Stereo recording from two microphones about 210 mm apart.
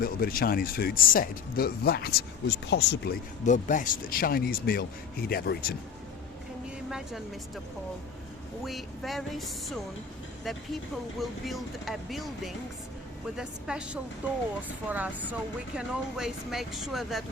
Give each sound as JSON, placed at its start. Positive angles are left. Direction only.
{"t": 0.0, "sound": "speech", "side_deg": 45}
{"t": 3.4, "sound": "speech", "side_deg": 35}
{"t": 6.9, "sound": "speech", "side_deg": 0}
{"t": 8.6, "sound": "speech", "side_deg": 0}